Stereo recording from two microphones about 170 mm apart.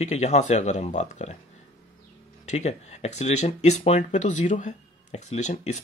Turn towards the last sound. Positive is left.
turn(degrees=45)  # may be behind; listen again after turning